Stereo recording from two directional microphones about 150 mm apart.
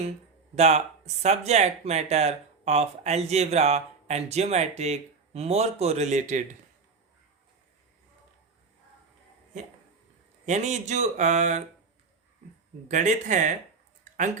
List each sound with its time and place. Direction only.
0.5 s speech: 45° right (ahead or behind)
9.5 s speech: 55° right (ahead or behind)
12.9 s speech: 55° right (ahead or behind)